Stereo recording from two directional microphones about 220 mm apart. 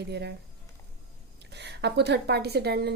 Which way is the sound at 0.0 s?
50° right (ahead or behind).